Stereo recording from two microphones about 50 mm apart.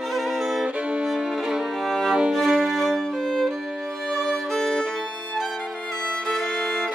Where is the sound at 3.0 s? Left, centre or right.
Centre.